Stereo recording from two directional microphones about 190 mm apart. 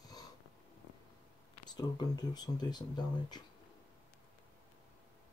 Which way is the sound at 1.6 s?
20° left (ahead or behind).